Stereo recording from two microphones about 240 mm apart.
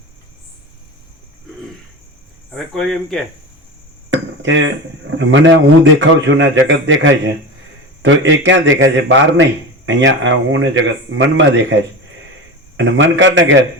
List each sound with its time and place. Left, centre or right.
2.7 s speech: centre
4.1 s a sound: right
5.1 s a man's voice: right
12.7 s a man's voice: right